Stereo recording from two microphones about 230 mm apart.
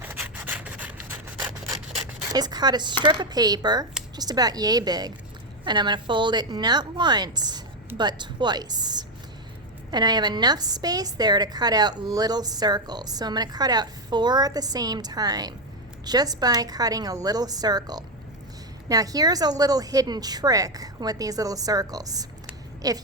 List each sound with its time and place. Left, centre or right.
0.0 s rub: centre
2.3 s a woman's voice: centre